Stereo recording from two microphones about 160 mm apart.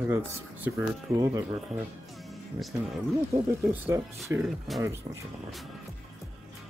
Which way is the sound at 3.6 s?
10° right (ahead or behind).